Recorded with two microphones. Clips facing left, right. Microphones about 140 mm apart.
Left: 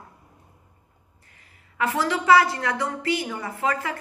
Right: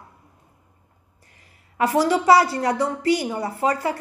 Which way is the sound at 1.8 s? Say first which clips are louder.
Right 6 dB; 35° right (ahead or behind).